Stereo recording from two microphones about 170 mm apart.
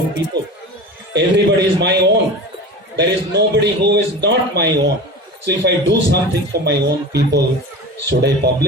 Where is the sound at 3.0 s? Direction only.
85° right.